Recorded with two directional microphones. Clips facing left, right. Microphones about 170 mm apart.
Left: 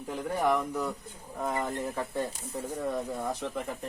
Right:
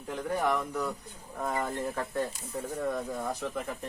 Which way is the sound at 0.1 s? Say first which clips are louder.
Left 1 dB; 5° left (ahead or behind).